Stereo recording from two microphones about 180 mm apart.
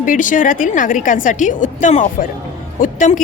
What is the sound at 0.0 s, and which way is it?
A woman's voice, 45° left (ahead or behind).